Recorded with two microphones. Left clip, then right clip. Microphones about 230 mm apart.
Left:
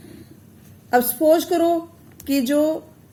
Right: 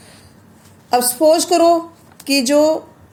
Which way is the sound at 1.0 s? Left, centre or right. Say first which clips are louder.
Right 3 dB; centre.